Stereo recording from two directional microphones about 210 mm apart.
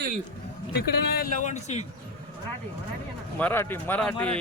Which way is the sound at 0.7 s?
50° left (ahead or behind).